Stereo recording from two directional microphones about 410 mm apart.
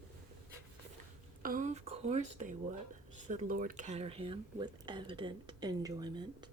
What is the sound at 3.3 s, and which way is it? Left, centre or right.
Speech, centre.